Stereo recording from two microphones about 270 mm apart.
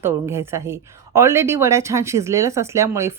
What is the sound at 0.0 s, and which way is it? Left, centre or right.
A woman's voice, centre.